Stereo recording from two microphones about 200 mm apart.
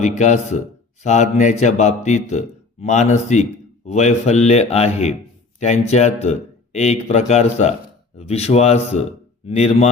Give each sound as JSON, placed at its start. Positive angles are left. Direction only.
{"t": 0.0, "sound": "a man's voice", "side_deg": 35}